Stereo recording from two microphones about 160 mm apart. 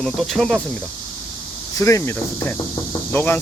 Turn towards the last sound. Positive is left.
turn(degrees=15)  # may be behind; listen again after turning